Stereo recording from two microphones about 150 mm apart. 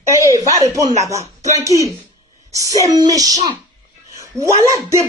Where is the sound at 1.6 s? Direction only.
20° right (ahead or behind).